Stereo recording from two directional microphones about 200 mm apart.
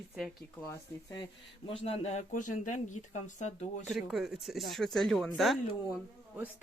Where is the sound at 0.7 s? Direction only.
20° left (ahead or behind); by 3.8 s 35° left (ahead or behind).